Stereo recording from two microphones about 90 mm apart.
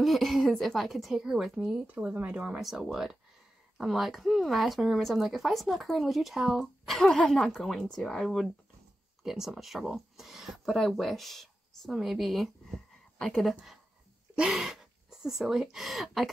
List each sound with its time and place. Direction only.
0.0 s speech: centre (ahead or behind)
1.9 s speech: 15° right (ahead or behind)